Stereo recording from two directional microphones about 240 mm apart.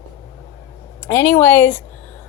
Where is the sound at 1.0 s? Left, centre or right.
Centre.